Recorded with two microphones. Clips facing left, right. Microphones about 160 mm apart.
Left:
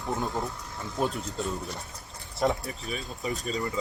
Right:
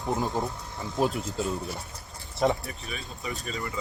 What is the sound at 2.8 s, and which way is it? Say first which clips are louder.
Speech: left 3 dB; 40° left (ahead or behind).